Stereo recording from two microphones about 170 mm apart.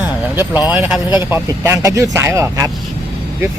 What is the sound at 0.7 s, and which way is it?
Speech, 5° right (ahead or behind).